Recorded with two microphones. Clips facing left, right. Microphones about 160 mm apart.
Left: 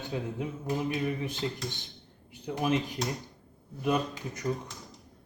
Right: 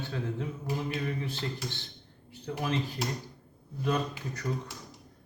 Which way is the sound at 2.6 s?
15° left (ahead or behind).